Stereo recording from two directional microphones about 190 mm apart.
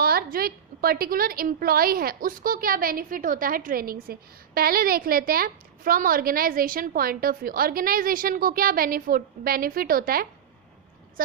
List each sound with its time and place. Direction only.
0.0 s a woman's voice: 50° right (ahead or behind)